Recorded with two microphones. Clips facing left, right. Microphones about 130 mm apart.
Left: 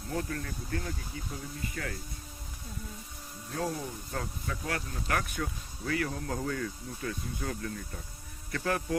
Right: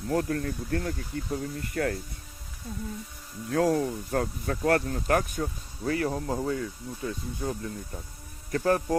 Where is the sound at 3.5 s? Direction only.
70° right (ahead or behind); by 7.7 s 20° right (ahead or behind).